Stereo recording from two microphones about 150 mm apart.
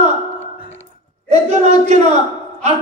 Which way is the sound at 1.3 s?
50° right (ahead or behind).